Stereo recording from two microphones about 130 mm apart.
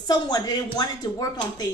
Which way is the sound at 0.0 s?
30° left (ahead or behind).